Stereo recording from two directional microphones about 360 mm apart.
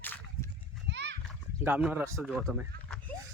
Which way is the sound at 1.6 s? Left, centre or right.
Centre.